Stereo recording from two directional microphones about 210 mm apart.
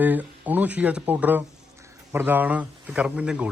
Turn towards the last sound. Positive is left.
turn(degrees=-5)  # may be behind; listen again after turning